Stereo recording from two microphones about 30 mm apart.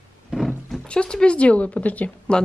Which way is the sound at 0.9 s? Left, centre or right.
Left.